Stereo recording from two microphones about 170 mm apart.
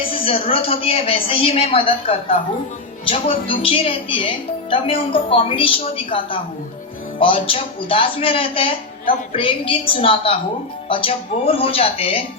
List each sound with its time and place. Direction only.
0.1 s a woman's voice: 30° left (ahead or behind)